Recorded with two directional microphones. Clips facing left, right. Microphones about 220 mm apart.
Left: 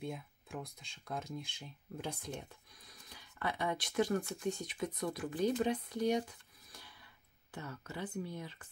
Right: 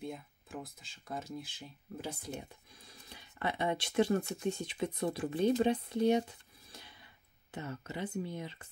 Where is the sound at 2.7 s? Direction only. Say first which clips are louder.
Right 3 dB; 25° right (ahead or behind).